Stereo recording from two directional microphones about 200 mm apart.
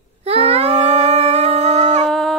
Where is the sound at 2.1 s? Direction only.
Centre (ahead or behind).